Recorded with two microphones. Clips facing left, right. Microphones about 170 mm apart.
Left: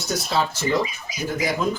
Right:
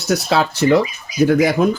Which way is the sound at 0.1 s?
70° right (ahead or behind).